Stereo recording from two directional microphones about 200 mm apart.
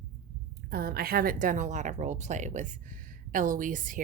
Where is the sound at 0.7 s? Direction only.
50° right (ahead or behind).